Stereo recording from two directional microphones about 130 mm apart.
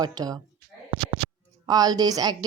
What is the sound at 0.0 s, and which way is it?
Speech, 30° right (ahead or behind).